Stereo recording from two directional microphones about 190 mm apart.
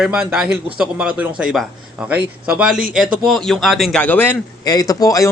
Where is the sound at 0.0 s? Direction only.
5° right (ahead or behind).